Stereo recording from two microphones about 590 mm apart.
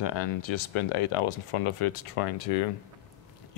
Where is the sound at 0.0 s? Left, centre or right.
Left.